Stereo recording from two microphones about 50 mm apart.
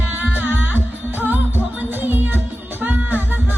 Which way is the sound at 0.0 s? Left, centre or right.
Right.